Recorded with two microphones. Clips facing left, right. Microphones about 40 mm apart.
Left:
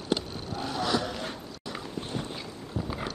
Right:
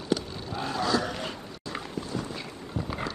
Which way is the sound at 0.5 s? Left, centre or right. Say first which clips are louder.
Right 2 dB; right.